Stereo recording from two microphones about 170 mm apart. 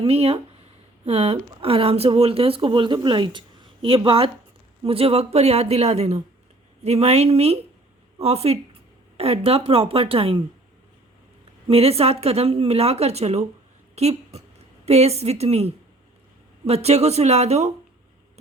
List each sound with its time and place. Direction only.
0.0 s speech: 35° right (ahead or behind)
11.7 s a woman's voice: 35° right (ahead or behind)